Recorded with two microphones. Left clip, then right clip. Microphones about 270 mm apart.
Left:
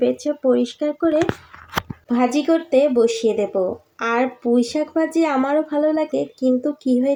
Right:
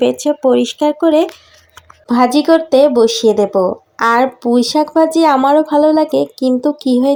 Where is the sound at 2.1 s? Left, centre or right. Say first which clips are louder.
Right 8 dB; right.